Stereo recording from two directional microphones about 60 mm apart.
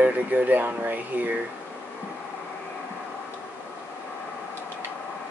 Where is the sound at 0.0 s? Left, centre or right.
Right.